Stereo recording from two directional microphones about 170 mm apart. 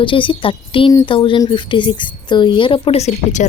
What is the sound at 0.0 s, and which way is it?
Speech, 30° left (ahead or behind).